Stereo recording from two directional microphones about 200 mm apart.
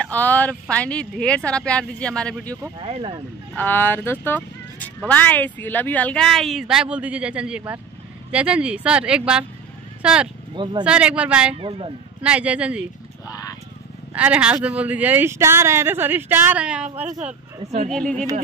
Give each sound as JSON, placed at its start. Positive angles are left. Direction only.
{"t": 0.0, "sound": "speech", "side_deg": 10}
{"t": 2.8, "sound": "speech", "side_deg": -25}
{"t": 3.5, "sound": "speech", "side_deg": 10}
{"t": 10.5, "sound": "speech", "side_deg": -25}
{"t": 10.8, "sound": "speech", "side_deg": -5}
{"t": 11.5, "sound": "speech", "side_deg": -25}
{"t": 12.2, "sound": "speech", "side_deg": -5}
{"t": 13.3, "sound": "vehicle", "side_deg": 20}
{"t": 14.1, "sound": "speech", "side_deg": -5}